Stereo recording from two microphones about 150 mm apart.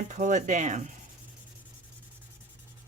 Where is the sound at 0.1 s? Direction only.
55° right (ahead or behind).